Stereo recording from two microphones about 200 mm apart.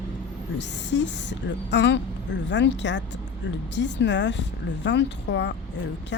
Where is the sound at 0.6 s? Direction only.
60° left (ahead or behind).